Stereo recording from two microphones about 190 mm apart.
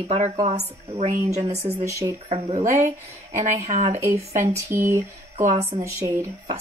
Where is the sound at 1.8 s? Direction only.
15° right (ahead or behind).